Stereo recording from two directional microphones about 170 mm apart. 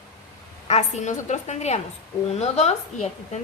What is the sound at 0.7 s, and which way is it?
A woman's voice, 40° left (ahead or behind).